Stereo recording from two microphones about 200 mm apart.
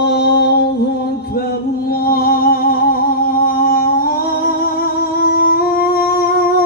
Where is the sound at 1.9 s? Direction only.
50° left (ahead or behind).